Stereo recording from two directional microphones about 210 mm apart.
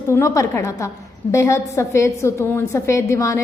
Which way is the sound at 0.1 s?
15° left (ahead or behind).